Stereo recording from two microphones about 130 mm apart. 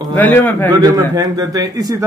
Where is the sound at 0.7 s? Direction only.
30° right (ahead or behind).